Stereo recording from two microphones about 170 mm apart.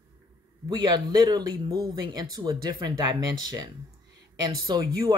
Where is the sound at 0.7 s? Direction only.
25° right (ahead or behind).